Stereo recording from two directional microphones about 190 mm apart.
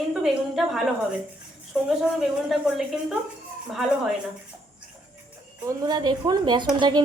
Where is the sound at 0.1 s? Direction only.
Centre (ahead or behind).